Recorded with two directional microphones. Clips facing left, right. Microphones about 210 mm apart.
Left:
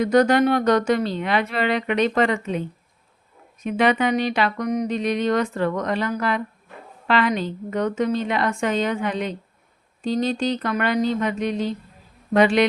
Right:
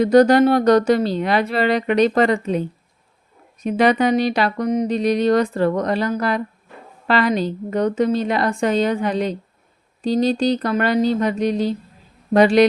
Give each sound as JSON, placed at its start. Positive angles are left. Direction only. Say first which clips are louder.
{"t": 0.0, "sound": "speech", "louder": "right 5 dB", "side_deg": -35}